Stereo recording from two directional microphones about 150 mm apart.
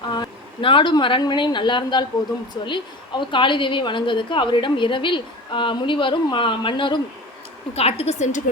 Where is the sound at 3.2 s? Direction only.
35° left (ahead or behind).